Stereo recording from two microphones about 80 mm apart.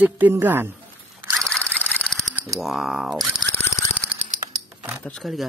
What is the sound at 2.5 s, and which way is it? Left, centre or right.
Speech, centre.